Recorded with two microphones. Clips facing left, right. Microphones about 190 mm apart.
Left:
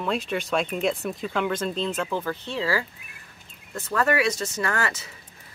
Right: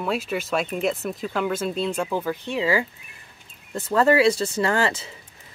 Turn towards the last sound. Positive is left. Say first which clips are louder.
# right 5 dB
turn(degrees=-30)  # may be behind; listen again after turning